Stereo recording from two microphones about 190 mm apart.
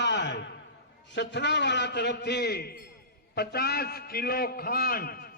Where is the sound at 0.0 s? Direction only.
70° left (ahead or behind).